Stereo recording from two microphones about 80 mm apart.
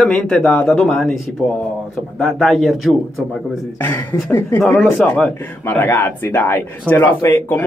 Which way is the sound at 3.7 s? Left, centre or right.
Left.